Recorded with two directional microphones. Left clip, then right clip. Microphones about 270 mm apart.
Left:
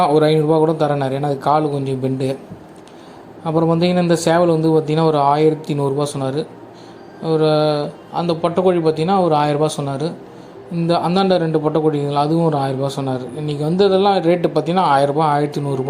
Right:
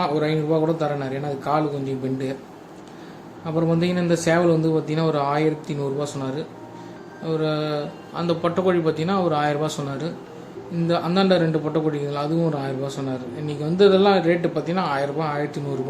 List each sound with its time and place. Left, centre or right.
0.0 s a man's voice: centre
3.4 s a man's voice: centre